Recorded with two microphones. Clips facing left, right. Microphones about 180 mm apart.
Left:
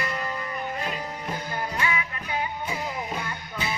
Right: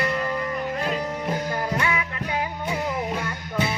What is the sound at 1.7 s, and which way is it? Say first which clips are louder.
Music: right 3 dB; 65° right (ahead or behind).